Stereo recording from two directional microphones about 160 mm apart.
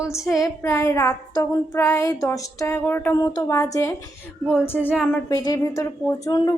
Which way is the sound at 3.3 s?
20° left (ahead or behind).